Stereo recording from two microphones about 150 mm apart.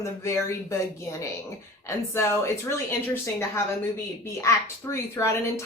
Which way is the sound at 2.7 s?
15° left (ahead or behind).